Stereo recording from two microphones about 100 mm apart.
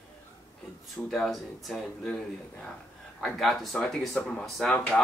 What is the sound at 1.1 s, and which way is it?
Speech, centre (ahead or behind).